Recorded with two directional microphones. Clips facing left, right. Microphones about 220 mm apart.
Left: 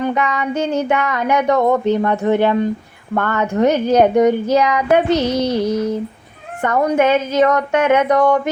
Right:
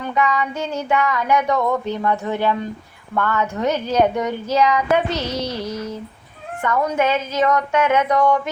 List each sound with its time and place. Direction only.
0.0 s child singing: 55° left (ahead or behind)
0.5 s child singing: 20° left (ahead or behind)
0.9 s speech: 55° left (ahead or behind)
1.5 s speech: 45° left (ahead or behind)
2.2 s speech: 60° left (ahead or behind)
5.1 s child singing: 20° left (ahead or behind)
6.6 s speech: 50° left (ahead or behind)